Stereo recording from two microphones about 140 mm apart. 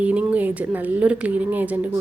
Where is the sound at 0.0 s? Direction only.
10° right (ahead or behind).